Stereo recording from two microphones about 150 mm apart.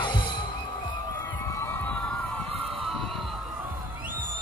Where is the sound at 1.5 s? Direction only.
15° left (ahead or behind).